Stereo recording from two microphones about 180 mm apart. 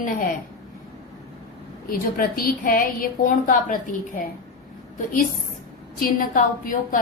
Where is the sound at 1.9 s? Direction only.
55° left (ahead or behind).